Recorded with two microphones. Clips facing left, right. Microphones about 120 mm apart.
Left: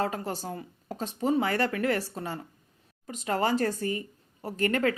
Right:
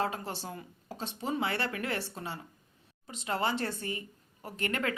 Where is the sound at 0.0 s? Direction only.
40° left (ahead or behind).